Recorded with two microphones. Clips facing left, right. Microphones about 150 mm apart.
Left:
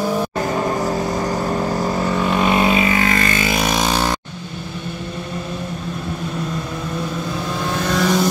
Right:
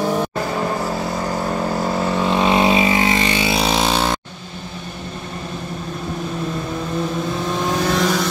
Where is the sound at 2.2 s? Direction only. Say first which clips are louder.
Right 1 dB; 20° right (ahead or behind).